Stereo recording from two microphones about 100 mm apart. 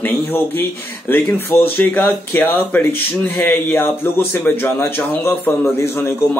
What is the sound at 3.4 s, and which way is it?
Speech, 15° left (ahead or behind).